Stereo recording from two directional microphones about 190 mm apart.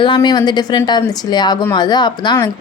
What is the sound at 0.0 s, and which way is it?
Speech, 25° left (ahead or behind).